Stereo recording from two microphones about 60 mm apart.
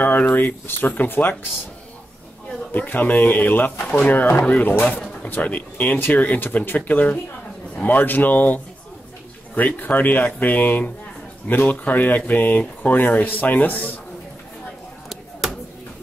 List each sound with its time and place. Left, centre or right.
0.0 s speech: left
2.7 s speech: left
9.6 s speech: left